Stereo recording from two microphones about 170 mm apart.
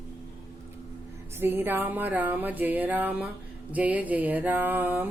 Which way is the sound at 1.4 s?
10° right (ahead or behind).